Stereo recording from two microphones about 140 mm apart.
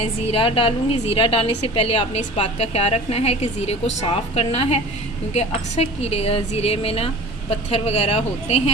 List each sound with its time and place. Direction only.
0.0 s a woman's voice: 45° left (ahead or behind)